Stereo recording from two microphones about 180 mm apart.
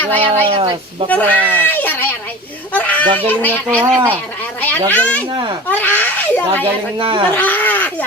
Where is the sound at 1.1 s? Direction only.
10° left (ahead or behind).